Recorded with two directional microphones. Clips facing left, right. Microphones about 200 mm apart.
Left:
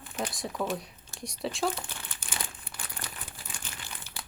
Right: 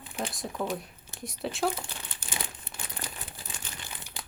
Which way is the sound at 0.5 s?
15° right (ahead or behind).